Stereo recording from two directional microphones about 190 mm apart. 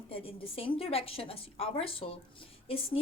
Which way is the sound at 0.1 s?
30° left (ahead or behind).